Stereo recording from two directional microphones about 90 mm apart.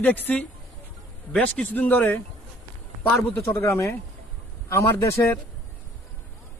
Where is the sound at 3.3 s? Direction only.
30° left (ahead or behind).